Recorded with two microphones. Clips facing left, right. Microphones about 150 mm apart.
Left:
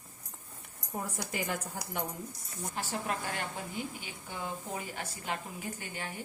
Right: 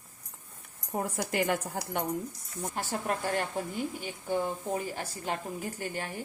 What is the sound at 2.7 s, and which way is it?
A woman's voice, 50° right (ahead or behind).